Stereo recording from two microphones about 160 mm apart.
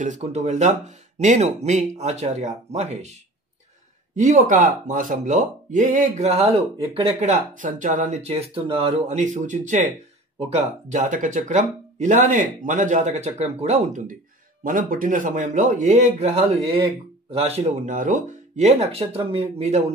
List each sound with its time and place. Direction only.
0.0 s speech: 45° right (ahead or behind)